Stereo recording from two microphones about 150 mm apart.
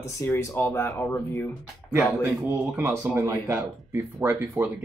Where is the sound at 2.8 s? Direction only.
15° right (ahead or behind).